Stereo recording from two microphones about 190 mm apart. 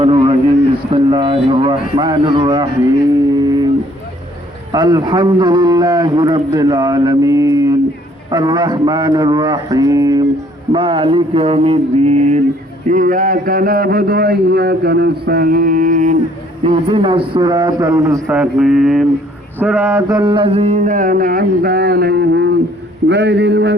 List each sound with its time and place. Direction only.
0.0 s a sound: 30° right (ahead or behind)
0.9 s a man's voice: 25° right (ahead or behind)
3.4 s a sound: 20° right (ahead or behind)
4.7 s a man's voice: 20° right (ahead or behind)
10.7 s mantra: 30° right (ahead or behind)
12.9 s speech: 45° right (ahead or behind)
16.6 s a man's voice: 30° right (ahead or behind)
18.3 s mantra: 5° right (ahead or behind)
19.5 s a man's voice: 10° right (ahead or behind); by 23.7 s 65° right (ahead or behind)